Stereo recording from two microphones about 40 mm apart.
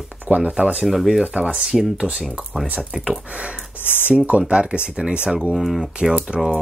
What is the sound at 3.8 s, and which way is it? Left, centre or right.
Speech, right.